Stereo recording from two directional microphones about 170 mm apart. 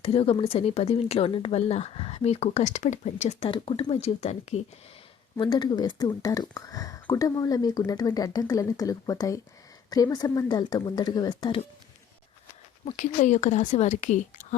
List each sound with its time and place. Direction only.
0.0 s a woman's voice: 35° left (ahead or behind)
5.4 s speech: 25° left (ahead or behind)
12.8 s a woman's voice: 45° left (ahead or behind)